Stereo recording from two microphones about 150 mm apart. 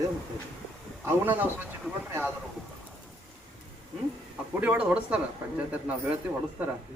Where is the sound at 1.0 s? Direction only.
15° right (ahead or behind).